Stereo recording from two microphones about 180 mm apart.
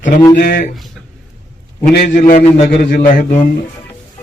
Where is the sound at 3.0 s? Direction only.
45° left (ahead or behind).